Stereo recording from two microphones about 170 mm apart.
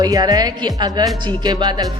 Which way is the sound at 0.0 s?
25° right (ahead or behind).